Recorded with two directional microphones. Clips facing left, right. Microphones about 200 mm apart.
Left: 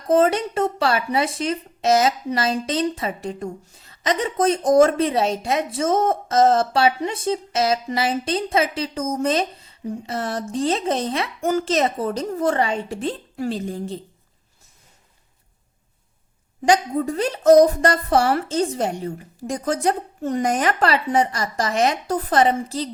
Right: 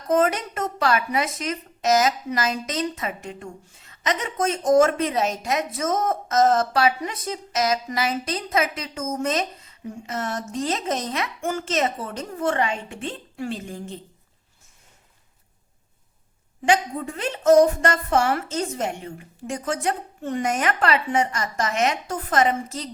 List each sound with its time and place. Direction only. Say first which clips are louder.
0.1 s speech: left 4 dB; 30° left (ahead or behind)
16.6 s speech: left 4 dB; 40° left (ahead or behind)